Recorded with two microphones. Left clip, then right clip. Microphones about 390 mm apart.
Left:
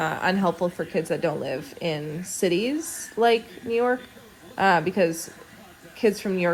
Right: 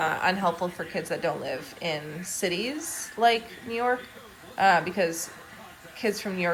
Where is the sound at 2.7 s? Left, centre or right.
Centre.